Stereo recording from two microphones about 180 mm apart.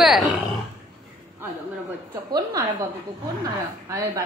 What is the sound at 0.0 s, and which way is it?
Speech, centre (ahead or behind).